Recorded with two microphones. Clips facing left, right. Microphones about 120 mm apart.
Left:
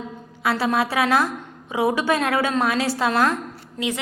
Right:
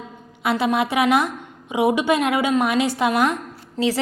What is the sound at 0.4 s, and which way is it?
A woman's voice, 20° right (ahead or behind).